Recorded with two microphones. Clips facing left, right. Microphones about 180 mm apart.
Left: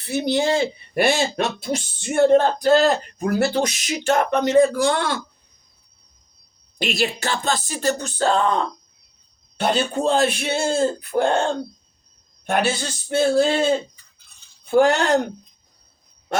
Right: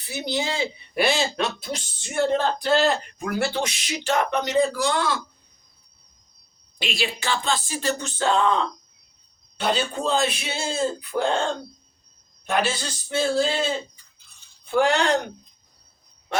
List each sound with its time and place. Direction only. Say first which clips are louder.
0.0 s speech: left 7 dB; 55° left (ahead or behind)
6.7 s speech: left 5 dB; 45° left (ahead or behind)
12.5 s speech: left 3 dB; 50° left (ahead or behind)
14.7 s speech: left 4 dB; 45° left (ahead or behind)